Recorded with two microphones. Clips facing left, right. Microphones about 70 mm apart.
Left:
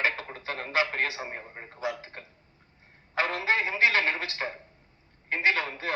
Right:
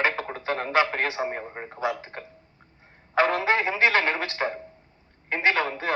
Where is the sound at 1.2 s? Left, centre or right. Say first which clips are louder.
Right 8 dB; right.